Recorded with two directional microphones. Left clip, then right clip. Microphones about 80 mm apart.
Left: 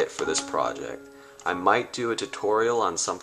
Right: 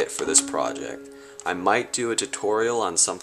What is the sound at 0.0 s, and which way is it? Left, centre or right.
Speech, right.